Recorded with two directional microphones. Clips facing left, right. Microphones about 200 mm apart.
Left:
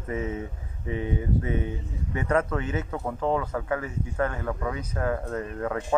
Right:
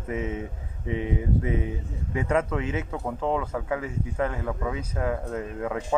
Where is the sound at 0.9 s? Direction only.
90° right.